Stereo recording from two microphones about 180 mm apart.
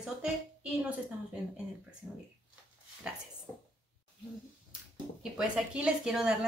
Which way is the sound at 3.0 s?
5° right (ahead or behind).